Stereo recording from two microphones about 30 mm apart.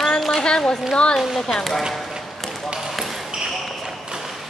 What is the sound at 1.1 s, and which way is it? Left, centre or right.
Speech, centre.